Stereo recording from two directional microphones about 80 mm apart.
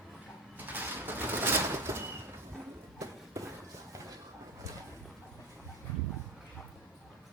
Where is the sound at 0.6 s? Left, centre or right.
Right.